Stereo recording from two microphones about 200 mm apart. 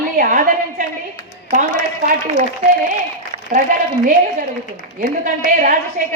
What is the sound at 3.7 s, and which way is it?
Speech, 40° right (ahead or behind).